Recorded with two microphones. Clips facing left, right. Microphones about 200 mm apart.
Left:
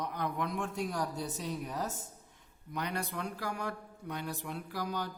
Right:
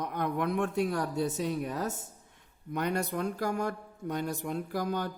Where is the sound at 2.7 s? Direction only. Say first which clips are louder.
Right 6 dB; 50° right (ahead or behind).